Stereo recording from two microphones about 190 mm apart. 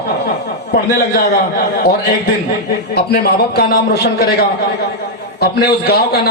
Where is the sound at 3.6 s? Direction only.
55° left (ahead or behind).